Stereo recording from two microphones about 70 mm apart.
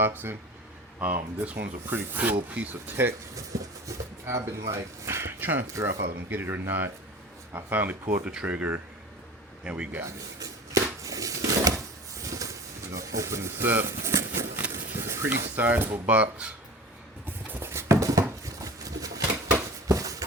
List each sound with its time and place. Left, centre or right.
0.0 s speech: right
3.3 s speech: right
5.8 s speech: right
6.2 s speech: right
8.2 s speech: centre
9.6 s speech: centre
10.0 s a sound: right
12.1 s vehicle: right
12.9 s speech: right
14.7 s a sound: right
15.5 s speech: right
17.2 s a sound: right